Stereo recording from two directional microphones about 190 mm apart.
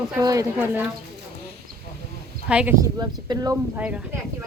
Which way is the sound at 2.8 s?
20° right (ahead or behind).